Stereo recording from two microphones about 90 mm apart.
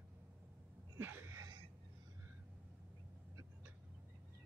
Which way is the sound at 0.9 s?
25° right (ahead or behind).